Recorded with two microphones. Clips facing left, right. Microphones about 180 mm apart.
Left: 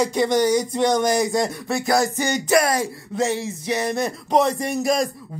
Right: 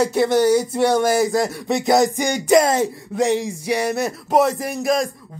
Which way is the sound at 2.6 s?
25° right (ahead or behind).